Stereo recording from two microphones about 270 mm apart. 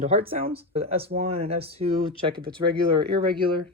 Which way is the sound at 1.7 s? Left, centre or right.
Right.